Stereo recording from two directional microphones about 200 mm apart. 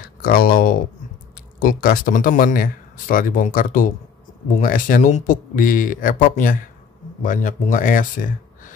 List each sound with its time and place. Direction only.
0.2 s speech: 45° left (ahead or behind)